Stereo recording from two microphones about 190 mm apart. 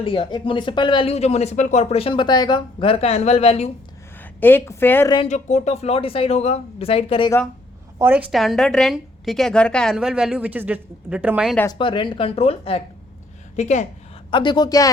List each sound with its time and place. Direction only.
0.0 s speech: 30° left (ahead or behind)
4.4 s speech: 10° left (ahead or behind)
5.1 s speech: 35° left (ahead or behind)
7.9 s a woman's voice: 10° right (ahead or behind)
11.5 s speech: 15° left (ahead or behind)
11.8 s speech: 25° left (ahead or behind)
14.3 s speech: 25° left (ahead or behind)